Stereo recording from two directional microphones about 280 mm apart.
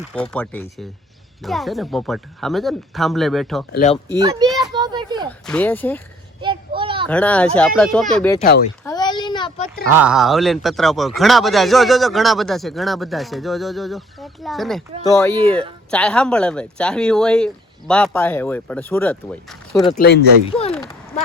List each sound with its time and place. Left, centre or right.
0.1 s speech: centre
3.7 s speech: left
4.2 s a child's voice: centre
4.5 s a sound: centre
5.5 s speech: centre
6.4 s children playing: centre
7.1 s speech: centre
8.8 s a sound: centre
9.8 s speech: centre
20.0 s speech: left
20.5 s a sound: left